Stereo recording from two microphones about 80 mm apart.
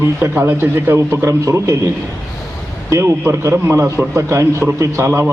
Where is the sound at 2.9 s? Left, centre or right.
Right.